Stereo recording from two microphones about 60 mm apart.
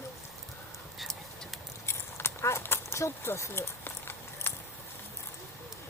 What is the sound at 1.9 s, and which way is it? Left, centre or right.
Horse, left.